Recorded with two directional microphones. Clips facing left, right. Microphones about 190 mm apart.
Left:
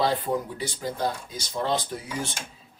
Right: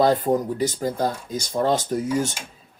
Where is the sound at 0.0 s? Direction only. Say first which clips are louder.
Right 6 dB; 45° right (ahead or behind).